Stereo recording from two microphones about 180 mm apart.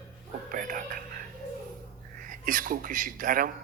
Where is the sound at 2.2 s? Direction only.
50° right (ahead or behind).